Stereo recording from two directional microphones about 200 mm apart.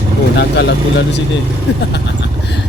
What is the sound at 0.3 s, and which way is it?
Speech, 60° left (ahead or behind).